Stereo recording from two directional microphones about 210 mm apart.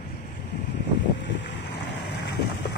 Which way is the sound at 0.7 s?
55° left (ahead or behind).